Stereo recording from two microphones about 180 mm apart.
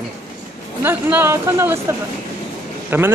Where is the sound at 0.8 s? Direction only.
10° right (ahead or behind).